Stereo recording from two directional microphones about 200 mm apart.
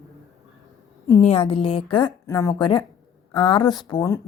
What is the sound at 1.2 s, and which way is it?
A woman's voice, 30° left (ahead or behind).